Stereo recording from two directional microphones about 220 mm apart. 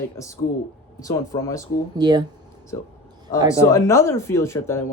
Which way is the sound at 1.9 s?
20° right (ahead or behind).